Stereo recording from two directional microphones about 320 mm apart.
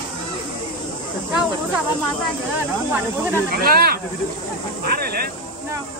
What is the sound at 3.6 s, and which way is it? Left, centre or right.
Speech, right.